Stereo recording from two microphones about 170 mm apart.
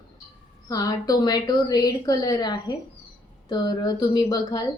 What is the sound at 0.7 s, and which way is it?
A woman's voice, 20° left (ahead or behind).